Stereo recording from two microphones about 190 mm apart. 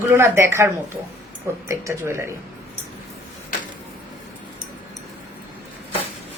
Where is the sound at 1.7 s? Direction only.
15° right (ahead or behind).